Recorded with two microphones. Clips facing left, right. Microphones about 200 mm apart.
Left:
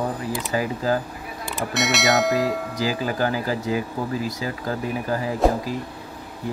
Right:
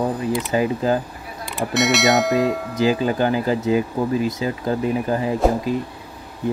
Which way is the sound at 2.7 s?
20° right (ahead or behind).